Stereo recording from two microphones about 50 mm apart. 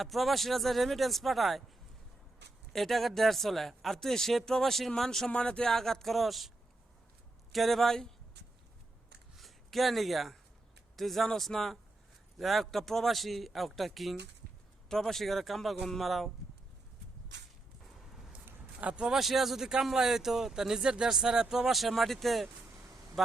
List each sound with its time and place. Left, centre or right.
0.0 s a man's voice: centre
2.7 s a man's voice: centre
7.5 s a man's voice: centre
9.4 s a man's voice: centre
18.8 s speech: right
19.2 s speech: centre
21.7 s a man's voice: centre